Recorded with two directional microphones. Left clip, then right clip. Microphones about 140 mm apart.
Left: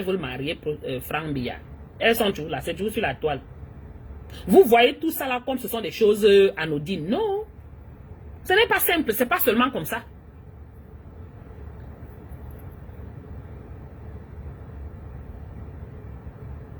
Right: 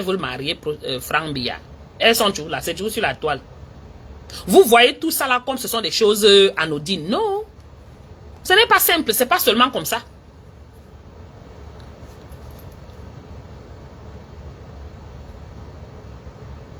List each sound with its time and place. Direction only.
0.1 s a woman's voice: 15° left (ahead or behind)
4.6 s a woman's voice: 15° left (ahead or behind)
8.4 s a woman's voice: 15° left (ahead or behind)